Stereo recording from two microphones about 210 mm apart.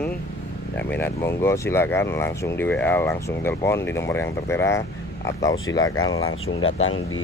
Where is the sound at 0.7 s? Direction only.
10° left (ahead or behind).